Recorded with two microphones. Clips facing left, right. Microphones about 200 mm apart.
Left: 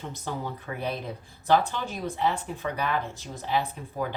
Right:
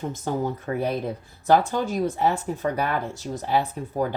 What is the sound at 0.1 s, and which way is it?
A woman's voice, 45° right (ahead or behind).